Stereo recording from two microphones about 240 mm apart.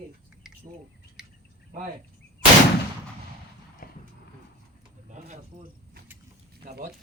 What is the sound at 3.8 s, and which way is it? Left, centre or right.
Clip-clop, left.